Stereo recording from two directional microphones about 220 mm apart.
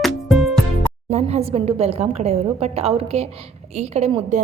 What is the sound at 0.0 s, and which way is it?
Music, centre (ahead or behind).